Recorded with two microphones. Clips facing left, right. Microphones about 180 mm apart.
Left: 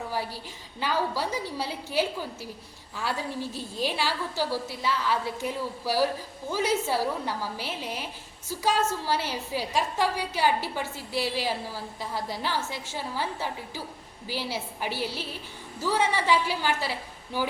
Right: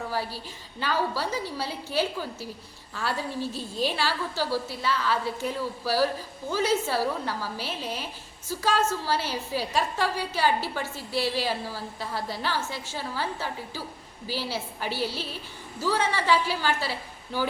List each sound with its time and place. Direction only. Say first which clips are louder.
0.1 s a woman's voice: right 1 dB; 15° left (ahead or behind)